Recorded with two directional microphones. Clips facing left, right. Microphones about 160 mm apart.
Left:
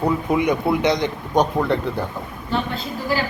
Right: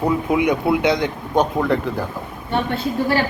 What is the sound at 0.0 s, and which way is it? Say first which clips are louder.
Speech: right 1 dB; 10° right (ahead or behind).